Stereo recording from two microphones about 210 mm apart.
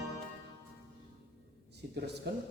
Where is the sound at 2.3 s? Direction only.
55° right (ahead or behind).